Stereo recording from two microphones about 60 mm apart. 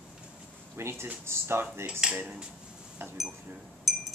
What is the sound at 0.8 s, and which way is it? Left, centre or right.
Speech, right.